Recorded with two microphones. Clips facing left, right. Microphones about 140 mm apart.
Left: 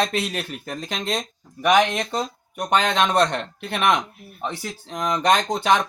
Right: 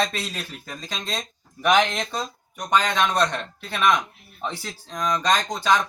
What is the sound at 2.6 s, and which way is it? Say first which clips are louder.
Speech: left 2 dB; 65° left (ahead or behind).